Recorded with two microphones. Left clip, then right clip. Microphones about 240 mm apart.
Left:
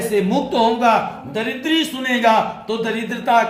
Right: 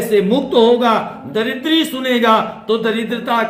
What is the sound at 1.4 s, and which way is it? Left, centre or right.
A man's voice, centre.